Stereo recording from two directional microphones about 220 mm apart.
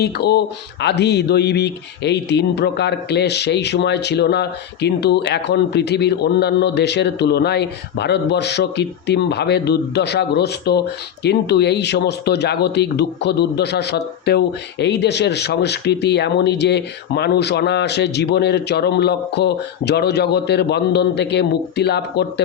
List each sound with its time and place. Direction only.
0.0 s speech: 50° left (ahead or behind)